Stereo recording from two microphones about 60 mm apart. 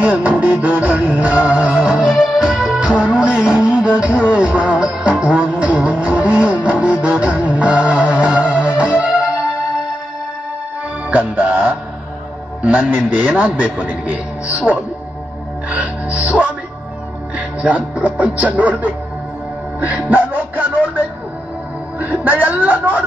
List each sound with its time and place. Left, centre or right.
0.0 s music: right; by 2.9 s centre
2.9 s music: centre
11.1 s music: right
12.6 s a sound: right
13.7 s a man's voice: right
15.7 s music: right
17.4 s speech: right
19.8 s music: right
21.9 s a sound: right